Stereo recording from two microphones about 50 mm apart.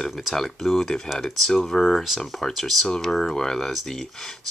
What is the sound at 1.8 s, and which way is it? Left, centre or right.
Speech, centre.